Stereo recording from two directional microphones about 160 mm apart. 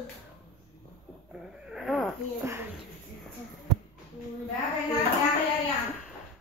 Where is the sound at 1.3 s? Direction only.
5° right (ahead or behind).